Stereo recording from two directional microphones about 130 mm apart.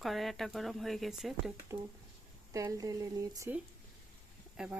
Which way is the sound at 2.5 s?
25° right (ahead or behind).